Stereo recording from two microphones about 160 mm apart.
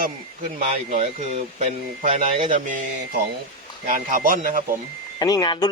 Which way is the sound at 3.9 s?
60° right (ahead or behind).